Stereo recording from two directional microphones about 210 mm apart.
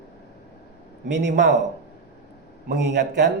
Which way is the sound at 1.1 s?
55° right (ahead or behind).